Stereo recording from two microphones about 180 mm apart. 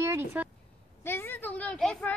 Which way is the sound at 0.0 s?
15° right (ahead or behind).